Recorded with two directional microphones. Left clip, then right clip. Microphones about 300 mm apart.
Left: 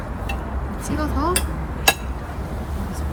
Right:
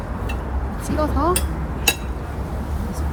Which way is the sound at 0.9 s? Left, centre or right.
Centre.